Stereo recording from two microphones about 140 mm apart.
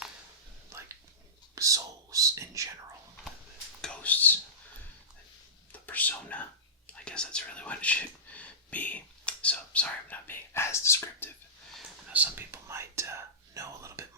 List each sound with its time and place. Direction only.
1.5 s whispering: 25° right (ahead or behind)
3.8 s whispering: 10° left (ahead or behind)
5.7 s a sound: 10° left (ahead or behind)
6.8 s whispering: 5° left (ahead or behind)
12.1 s whispering: 15° right (ahead or behind)